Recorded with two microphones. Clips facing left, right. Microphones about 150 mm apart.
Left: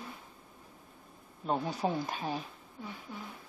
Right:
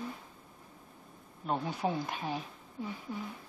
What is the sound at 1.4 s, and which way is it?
Speech, centre (ahead or behind).